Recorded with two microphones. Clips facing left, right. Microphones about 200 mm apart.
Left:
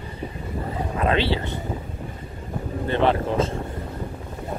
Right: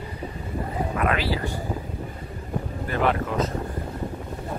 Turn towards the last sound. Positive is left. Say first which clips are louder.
# left 3 dB
turn(degrees=30)  # may be behind; listen again after turning